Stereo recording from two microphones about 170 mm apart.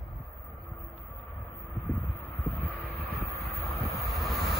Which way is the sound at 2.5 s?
65° right (ahead or behind).